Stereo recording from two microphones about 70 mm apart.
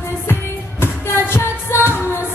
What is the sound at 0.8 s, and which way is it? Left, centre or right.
Singing, left.